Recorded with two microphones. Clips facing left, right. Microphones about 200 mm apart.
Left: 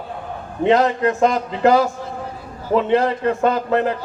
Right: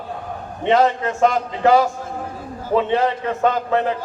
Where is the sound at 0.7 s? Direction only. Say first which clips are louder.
Left 1 dB; 40° left (ahead or behind).